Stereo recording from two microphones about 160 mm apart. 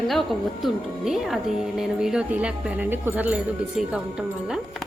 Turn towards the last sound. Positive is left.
turn(degrees=-5)  # may be behind; listen again after turning